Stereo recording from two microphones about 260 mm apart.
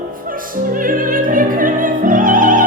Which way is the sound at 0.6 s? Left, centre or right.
Right.